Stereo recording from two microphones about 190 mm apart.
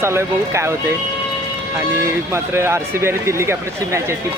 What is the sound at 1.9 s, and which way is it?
Speech, 15° right (ahead or behind).